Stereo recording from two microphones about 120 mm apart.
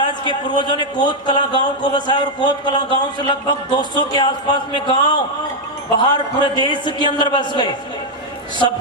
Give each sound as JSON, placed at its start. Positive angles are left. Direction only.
{"t": 0.3, "sound": "a man's voice", "side_deg": 40}